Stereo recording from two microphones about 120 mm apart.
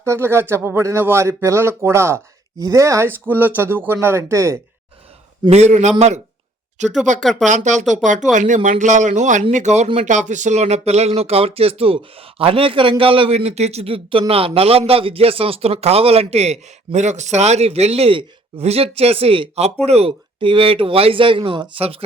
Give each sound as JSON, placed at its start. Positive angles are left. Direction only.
{"t": 0.0, "sound": "speech", "side_deg": -20}
{"t": 5.5, "sound": "a man's voice", "side_deg": -65}
{"t": 7.0, "sound": "speech", "side_deg": -90}
{"t": 10.0, "sound": "speech", "side_deg": -90}